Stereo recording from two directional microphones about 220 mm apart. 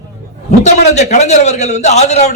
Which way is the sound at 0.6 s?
30° left (ahead or behind).